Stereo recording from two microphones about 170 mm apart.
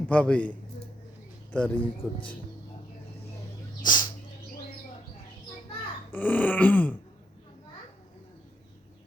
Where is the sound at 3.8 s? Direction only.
25° left (ahead or behind).